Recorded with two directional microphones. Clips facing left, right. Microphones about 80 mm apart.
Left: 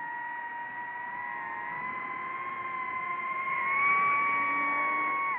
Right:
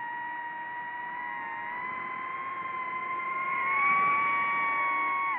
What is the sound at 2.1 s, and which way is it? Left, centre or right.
Vehicle, centre.